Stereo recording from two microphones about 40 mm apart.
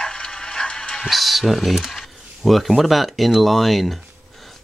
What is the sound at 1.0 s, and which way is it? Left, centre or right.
Speech, centre.